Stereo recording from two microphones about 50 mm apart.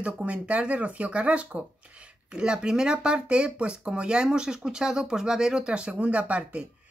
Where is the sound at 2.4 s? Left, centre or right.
Centre.